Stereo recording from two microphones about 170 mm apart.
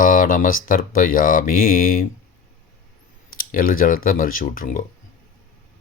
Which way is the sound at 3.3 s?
55° left (ahead or behind).